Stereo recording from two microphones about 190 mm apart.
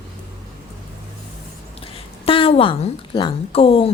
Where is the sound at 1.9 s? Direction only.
30° left (ahead or behind).